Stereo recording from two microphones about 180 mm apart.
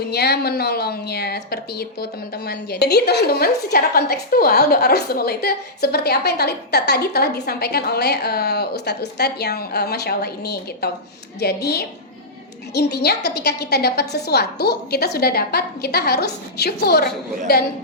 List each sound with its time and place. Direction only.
0.0 s a woman's voice: 65° left (ahead or behind)